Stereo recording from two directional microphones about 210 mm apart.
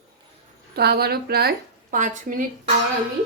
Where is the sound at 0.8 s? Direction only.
50° right (ahead or behind).